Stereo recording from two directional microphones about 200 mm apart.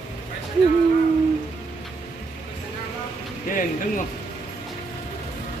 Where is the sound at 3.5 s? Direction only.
40° left (ahead or behind).